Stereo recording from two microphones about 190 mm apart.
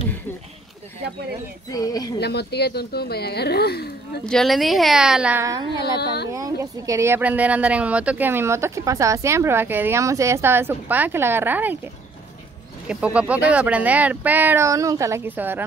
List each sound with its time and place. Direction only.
1.7 s speech: 20° left (ahead or behind)
2.1 s speech: 60° left (ahead or behind)
4.3 s a woman's voice: centre (ahead or behind)